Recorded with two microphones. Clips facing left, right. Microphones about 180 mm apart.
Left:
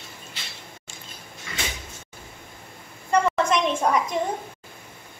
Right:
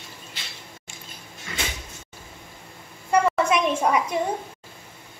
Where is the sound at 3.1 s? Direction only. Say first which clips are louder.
Right 1 dB; 10° right (ahead or behind).